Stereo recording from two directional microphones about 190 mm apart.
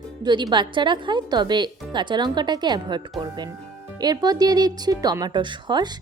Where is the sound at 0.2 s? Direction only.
20° right (ahead or behind).